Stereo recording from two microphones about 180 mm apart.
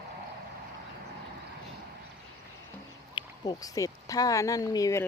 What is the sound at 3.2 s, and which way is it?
Speech, 20° left (ahead or behind).